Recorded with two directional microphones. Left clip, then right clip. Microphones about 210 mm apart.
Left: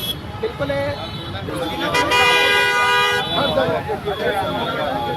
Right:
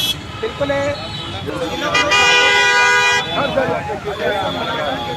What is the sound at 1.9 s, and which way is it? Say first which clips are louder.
Vehicle: right 3 dB; 50° left (ahead or behind).